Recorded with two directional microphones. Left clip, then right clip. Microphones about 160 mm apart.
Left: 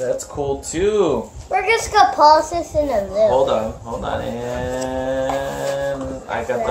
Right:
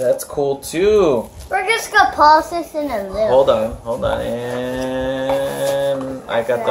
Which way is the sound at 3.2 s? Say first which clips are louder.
Right 5 dB; 20° right (ahead or behind).